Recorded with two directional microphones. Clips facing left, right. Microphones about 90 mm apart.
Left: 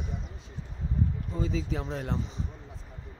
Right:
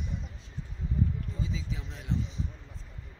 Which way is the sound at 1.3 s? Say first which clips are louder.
Left 6 dB; 45° left (ahead or behind).